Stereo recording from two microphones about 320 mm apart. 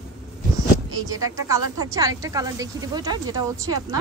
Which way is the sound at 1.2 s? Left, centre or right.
Centre.